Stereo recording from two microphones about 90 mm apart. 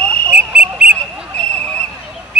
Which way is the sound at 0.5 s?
15° right (ahead or behind).